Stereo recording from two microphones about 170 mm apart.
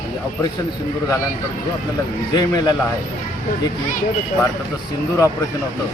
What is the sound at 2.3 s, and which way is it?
Speech, 25° left (ahead or behind).